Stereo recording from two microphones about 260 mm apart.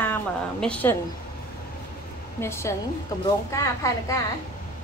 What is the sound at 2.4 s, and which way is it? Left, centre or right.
Speech, centre.